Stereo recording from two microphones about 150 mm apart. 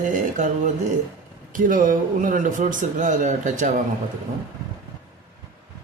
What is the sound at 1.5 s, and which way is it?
A man's voice, 65° right (ahead or behind).